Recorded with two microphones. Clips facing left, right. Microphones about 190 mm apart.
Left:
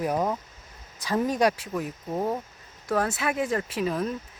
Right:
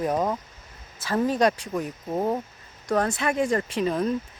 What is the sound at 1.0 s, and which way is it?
Speech, 15° left (ahead or behind).